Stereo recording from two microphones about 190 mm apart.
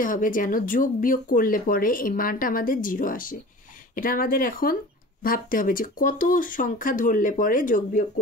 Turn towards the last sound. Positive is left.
turn(degrees=45)  # may be behind; listen again after turning